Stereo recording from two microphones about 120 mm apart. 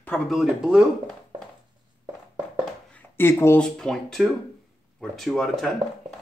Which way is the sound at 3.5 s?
5° left (ahead or behind).